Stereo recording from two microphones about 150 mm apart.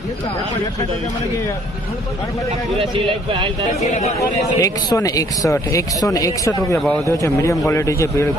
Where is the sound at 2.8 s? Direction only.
35° right (ahead or behind).